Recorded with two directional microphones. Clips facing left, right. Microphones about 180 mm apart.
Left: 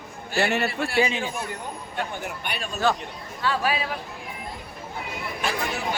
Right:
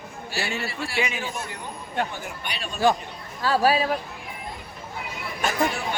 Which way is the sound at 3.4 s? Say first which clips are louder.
Right 5 dB; 40° right (ahead or behind).